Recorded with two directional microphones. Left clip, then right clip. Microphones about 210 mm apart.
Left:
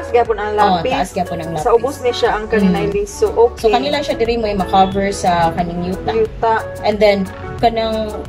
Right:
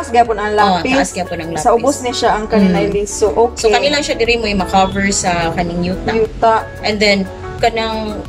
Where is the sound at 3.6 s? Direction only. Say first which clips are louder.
Right 2 dB; 20° left (ahead or behind).